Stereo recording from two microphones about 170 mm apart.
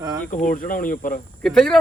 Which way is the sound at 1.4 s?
5° left (ahead or behind).